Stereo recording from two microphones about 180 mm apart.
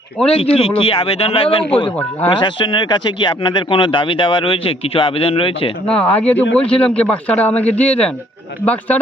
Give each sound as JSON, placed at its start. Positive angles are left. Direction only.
{"t": 0.3, "sound": "speech", "side_deg": 30}
{"t": 5.8, "sound": "speech", "side_deg": 5}